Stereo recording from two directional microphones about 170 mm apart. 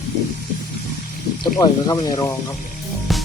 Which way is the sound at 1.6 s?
20° left (ahead or behind).